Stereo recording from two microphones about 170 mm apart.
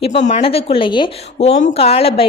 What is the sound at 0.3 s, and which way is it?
A woman's voice, 40° left (ahead or behind).